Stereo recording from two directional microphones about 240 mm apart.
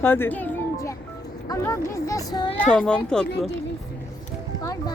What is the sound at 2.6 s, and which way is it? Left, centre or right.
Speech, centre.